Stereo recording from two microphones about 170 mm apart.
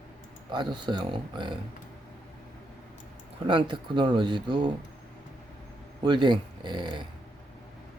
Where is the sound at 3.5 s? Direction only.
30° right (ahead or behind).